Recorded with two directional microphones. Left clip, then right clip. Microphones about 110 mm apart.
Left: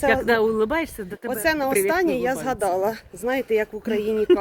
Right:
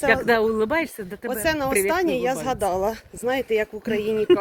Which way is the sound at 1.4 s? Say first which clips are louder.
Left 1 dB; 50° left (ahead or behind).